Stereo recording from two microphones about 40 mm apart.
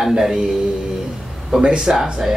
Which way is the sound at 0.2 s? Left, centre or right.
Centre.